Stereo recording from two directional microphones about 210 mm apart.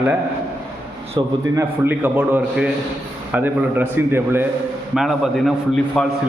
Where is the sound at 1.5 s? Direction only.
10° right (ahead or behind).